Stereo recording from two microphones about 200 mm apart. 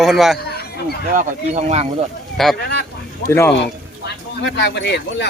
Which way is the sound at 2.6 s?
55° left (ahead or behind).